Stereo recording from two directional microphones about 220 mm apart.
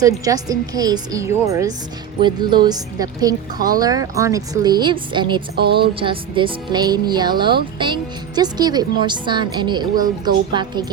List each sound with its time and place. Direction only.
0.3 s speech: 15° right (ahead or behind)
5.5 s speech: 45° right (ahead or behind)
5.9 s speech: 25° right (ahead or behind)